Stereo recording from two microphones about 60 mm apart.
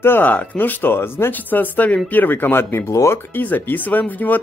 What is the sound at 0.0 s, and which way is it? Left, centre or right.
Speech, left.